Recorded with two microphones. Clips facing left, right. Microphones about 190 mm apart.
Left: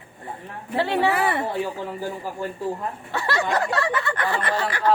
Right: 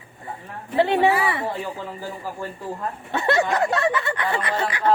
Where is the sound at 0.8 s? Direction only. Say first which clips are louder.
Right 3 dB; 20° right (ahead or behind).